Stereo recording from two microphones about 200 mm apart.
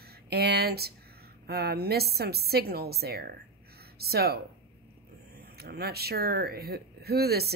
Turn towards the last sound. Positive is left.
turn(degrees=-50)  # may be behind; listen again after turning